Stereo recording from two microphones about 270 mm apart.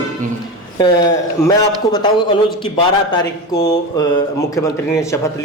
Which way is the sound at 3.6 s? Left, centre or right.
Centre.